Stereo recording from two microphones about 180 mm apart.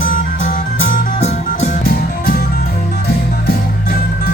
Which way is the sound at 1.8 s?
55° left (ahead or behind).